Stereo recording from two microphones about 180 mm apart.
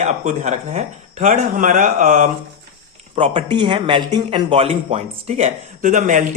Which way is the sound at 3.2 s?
30° right (ahead or behind).